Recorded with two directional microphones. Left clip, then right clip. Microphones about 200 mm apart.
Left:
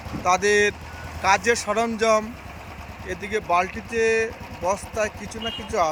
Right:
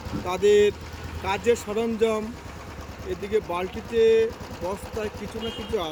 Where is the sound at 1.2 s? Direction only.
Centre (ahead or behind).